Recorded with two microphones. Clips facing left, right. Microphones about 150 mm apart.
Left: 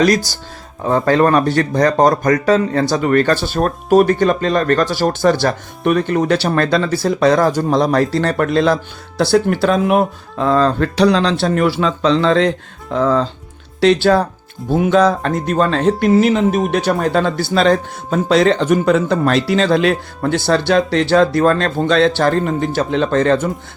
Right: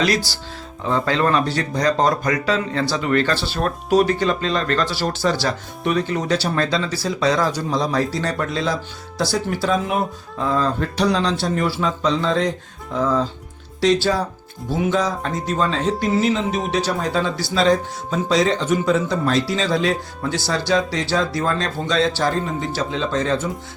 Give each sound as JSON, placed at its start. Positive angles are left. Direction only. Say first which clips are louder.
{"t": 0.9, "sound": "speech", "louder": "left 6 dB", "side_deg": 50}
{"t": 13.8, "sound": "speech", "louder": "left 6 dB", "side_deg": 60}